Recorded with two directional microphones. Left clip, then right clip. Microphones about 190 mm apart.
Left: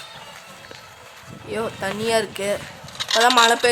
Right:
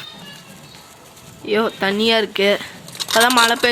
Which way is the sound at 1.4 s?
10° right (ahead or behind).